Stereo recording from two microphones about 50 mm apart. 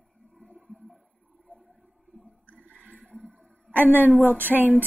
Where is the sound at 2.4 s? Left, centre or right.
Left.